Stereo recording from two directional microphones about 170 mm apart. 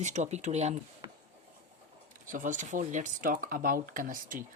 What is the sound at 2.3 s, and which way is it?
Speech, 50° right (ahead or behind).